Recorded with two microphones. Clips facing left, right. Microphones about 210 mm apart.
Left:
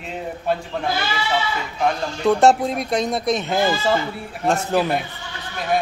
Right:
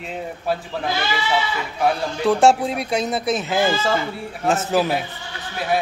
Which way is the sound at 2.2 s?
Centre (ahead or behind).